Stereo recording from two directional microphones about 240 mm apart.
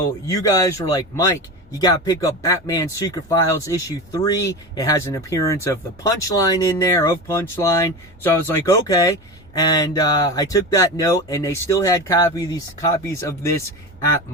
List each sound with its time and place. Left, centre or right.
0.0 s speech: centre